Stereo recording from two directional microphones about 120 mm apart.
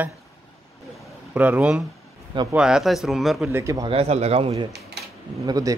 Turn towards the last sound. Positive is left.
turn(degrees=-30)  # may be behind; listen again after turning